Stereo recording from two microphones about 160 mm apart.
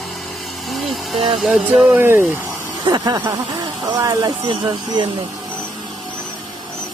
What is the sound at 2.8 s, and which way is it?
Speech, 25° right (ahead or behind).